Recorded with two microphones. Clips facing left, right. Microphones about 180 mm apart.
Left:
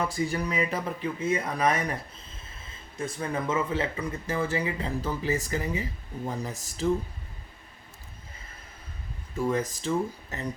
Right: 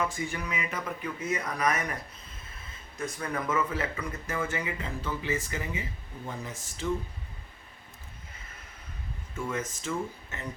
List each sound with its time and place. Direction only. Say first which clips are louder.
0.0 s speech: left 4 dB; 40° left (ahead or behind)
3.0 s speech: left 3 dB; 30° left (ahead or behind)
9.3 s speech: left 6 dB; 35° left (ahead or behind)